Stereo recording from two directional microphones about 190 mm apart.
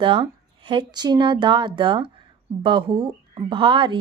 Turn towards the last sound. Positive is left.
turn(degrees=-25)  # may be behind; listen again after turning